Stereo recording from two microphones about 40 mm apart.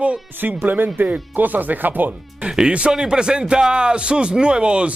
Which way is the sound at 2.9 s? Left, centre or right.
Centre.